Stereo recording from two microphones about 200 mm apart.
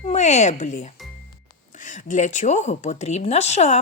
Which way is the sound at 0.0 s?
35° left (ahead or behind).